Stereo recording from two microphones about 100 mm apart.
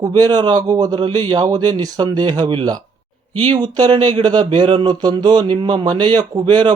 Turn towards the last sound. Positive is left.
turn(degrees=-50)  # may be behind; listen again after turning